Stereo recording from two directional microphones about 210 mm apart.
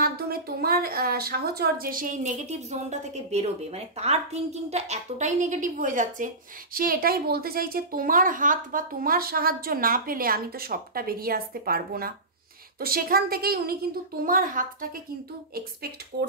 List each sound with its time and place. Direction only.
0.0 s speech: 45° right (ahead or behind)